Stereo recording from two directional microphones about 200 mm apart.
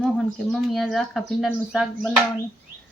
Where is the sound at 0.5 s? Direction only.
Centre (ahead or behind).